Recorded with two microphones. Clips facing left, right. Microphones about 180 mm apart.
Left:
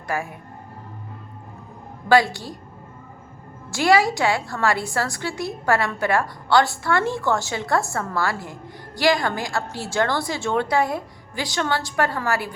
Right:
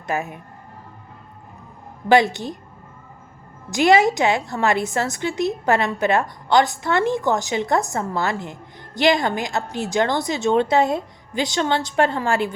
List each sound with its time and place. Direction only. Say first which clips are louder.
0.1 s a woman's voice: right 2 dB; 20° right (ahead or behind)
2.0 s a woman's voice: right 2 dB; 20° right (ahead or behind)
3.7 s a woman's voice: right 3 dB; 20° right (ahead or behind)